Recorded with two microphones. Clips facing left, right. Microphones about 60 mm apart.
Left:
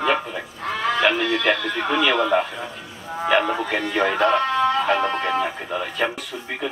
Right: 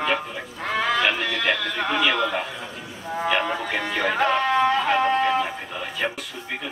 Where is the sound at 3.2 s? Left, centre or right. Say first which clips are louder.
Left 4 dB; centre.